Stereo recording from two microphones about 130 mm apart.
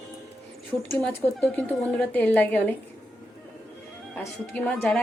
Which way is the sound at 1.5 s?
10° left (ahead or behind).